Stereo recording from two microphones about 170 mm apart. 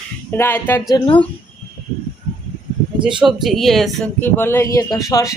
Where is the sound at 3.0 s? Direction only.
30° right (ahead or behind).